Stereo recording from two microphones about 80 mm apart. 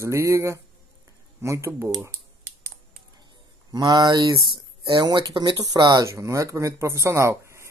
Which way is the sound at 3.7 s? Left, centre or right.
Right.